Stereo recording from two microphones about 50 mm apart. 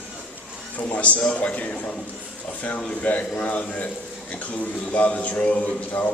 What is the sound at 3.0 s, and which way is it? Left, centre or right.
A man's voice, left.